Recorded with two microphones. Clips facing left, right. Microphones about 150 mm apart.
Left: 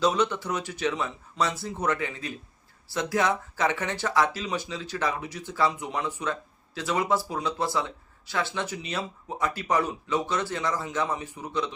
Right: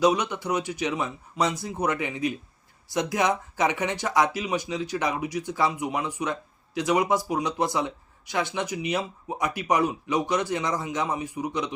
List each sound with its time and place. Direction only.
0.0 s speech: 15° right (ahead or behind)